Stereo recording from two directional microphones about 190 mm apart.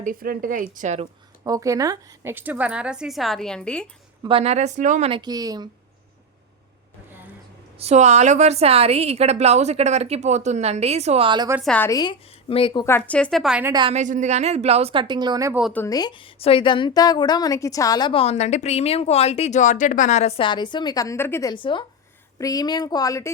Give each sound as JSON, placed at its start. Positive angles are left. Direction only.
{"t": 0.0, "sound": "speech", "side_deg": -50}
{"t": 1.5, "sound": "a woman's voice", "side_deg": -20}
{"t": 4.2, "sound": "a woman's voice", "side_deg": -30}
{"t": 7.8, "sound": "a woman's voice", "side_deg": -35}
{"t": 11.6, "sound": "a woman's voice", "side_deg": 5}
{"t": 11.9, "sound": "a woman's voice", "side_deg": 20}
{"t": 12.8, "sound": "a woman's voice", "side_deg": 10}
{"t": 13.9, "sound": "a woman's voice", "side_deg": -40}
{"t": 15.7, "sound": "a woman's voice", "side_deg": 15}
{"t": 21.5, "sound": "a woman's voice", "side_deg": 25}